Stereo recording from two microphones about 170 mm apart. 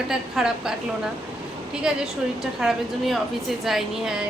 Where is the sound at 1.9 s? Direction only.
5° right (ahead or behind).